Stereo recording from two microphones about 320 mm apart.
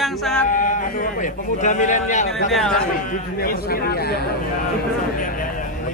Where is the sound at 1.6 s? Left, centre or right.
Left.